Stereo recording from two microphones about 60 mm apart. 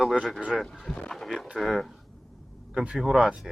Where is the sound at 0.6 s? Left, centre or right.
Centre.